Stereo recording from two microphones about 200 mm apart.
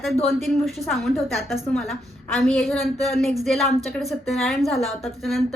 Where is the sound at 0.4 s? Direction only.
Centre (ahead or behind).